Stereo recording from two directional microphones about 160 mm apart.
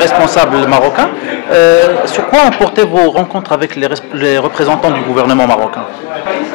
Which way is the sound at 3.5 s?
15° left (ahead or behind).